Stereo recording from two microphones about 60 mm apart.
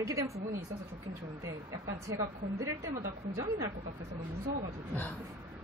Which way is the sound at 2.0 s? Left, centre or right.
Right.